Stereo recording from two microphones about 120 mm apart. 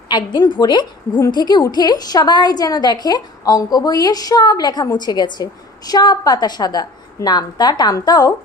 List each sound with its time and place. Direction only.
0.1 s a woman's voice: 35° left (ahead or behind)